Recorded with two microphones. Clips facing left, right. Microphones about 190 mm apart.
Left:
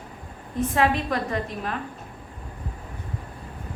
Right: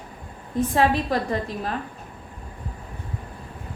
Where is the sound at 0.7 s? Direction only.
35° right (ahead or behind).